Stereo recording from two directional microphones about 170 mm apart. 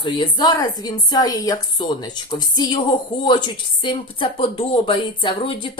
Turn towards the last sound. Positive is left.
turn(degrees=30)  # may be behind; listen again after turning